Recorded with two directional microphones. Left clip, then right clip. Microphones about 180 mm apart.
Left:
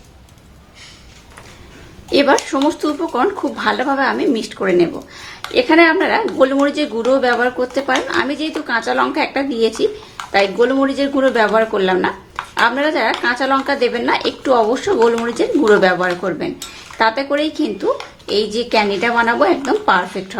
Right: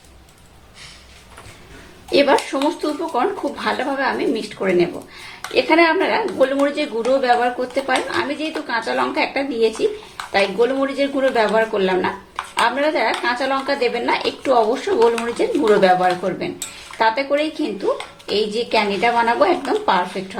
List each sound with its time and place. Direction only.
2.0 s a woman's voice: 25° left (ahead or behind)